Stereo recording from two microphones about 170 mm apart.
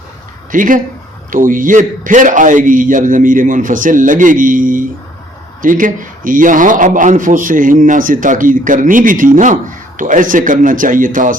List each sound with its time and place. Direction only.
0.5 s a man's voice: 50° right (ahead or behind)